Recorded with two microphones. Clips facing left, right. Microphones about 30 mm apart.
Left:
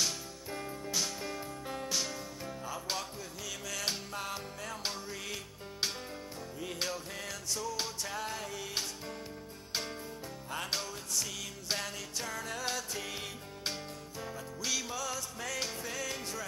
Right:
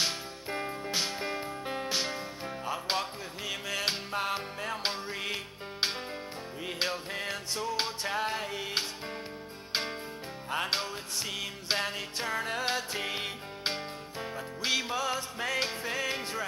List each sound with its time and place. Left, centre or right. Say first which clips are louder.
0.0 s music: right 3 dB; right